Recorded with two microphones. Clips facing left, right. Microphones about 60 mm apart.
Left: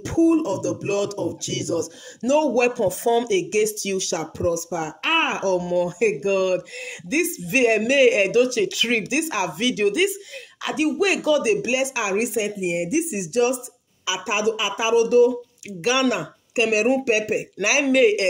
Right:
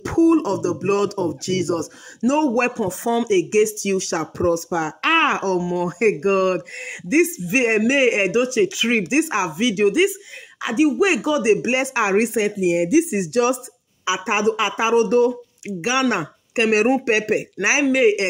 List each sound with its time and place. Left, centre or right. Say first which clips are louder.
0.0 s speech: right 2 dB; right
0.6 s speech: right 4 dB; right
2.9 s speech: right 1 dB; right
4.2 s speech: right 3 dB; right
5.8 s speech: right 1 dB; right
6.8 s speech: right 5 dB; right
11.7 s speech: right 4 dB; right
12.4 s speech: right 5 dB; right
14.0 s speech: right 3 dB; right
15.8 s speech: even; centre
16.1 s speech: right 2 dB; right
17.0 s speech: right 2 dB; right
17.6 s speech: left 1 dB; right